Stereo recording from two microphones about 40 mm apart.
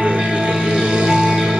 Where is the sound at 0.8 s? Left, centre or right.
Centre.